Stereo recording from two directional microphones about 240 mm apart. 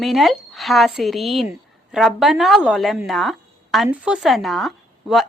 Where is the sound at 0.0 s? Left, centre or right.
Centre.